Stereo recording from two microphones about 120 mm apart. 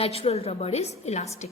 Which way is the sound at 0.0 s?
55° left (ahead or behind).